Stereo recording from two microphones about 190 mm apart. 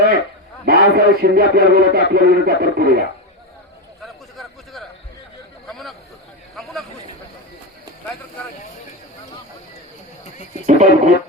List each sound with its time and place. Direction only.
0.6 s a man's voice: 55° right (ahead or behind)
4.0 s chatter: centre (ahead or behind)
5.6 s a sound: centre (ahead or behind)
10.7 s speech: 40° right (ahead or behind)